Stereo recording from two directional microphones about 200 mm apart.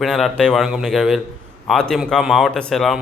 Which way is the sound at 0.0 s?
Centre (ahead or behind).